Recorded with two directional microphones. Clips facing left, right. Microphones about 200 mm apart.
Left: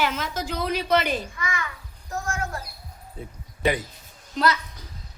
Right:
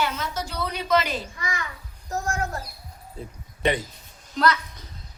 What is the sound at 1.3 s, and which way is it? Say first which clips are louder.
Speech: left 1 dB; 35° right (ahead or behind).